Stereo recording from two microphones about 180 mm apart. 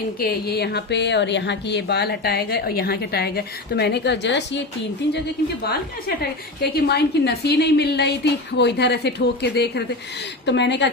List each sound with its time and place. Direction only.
0.2 s speech: 60° left (ahead or behind)
6.6 s speech: 65° left (ahead or behind)